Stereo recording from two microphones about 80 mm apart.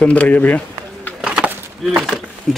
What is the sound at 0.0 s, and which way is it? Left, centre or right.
Speech, centre.